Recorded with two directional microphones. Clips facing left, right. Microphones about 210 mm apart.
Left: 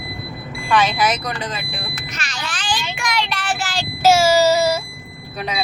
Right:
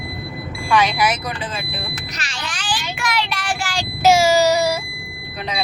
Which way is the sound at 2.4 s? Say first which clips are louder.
Left 1 dB; 10° right (ahead or behind).